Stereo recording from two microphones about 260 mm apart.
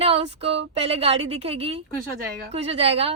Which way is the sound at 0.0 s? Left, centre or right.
Right.